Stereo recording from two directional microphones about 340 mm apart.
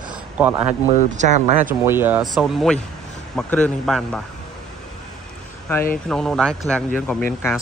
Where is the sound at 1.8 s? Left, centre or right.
Centre.